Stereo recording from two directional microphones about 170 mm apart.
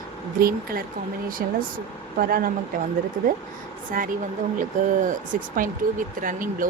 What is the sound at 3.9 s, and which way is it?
Speech, 55° right (ahead or behind).